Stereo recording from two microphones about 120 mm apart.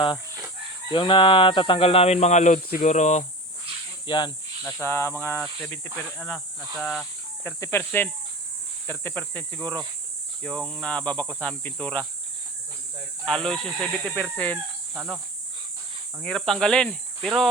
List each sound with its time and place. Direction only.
0.9 s speech: 45° left (ahead or behind); by 3.2 s 75° left (ahead or behind)
4.0 s cricket: 40° left (ahead or behind)
4.6 s cricket: 20° left (ahead or behind)
5.6 s speech: 15° left (ahead or behind)
7.4 s cricket: 20° left (ahead or behind)
8.9 s speech: 15° left (ahead or behind)
13.2 s speech: 5° left (ahead or behind)
14.9 s speech: 5° right (ahead or behind)
16.2 s speech: 5° left (ahead or behind)